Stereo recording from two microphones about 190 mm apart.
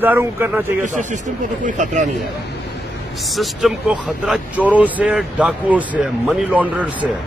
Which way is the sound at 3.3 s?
Centre (ahead or behind).